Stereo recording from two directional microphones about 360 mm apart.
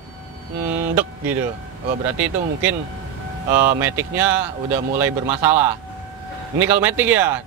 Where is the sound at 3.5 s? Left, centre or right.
Centre.